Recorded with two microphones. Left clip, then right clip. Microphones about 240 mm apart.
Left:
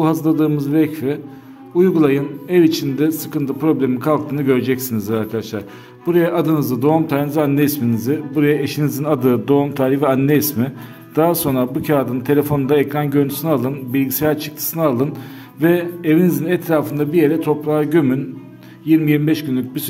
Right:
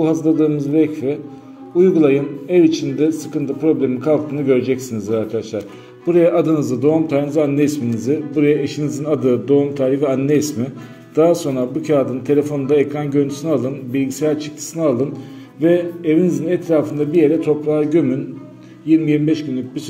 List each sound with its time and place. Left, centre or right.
0.0 s a man's voice: left
11.8 s a man's voice: left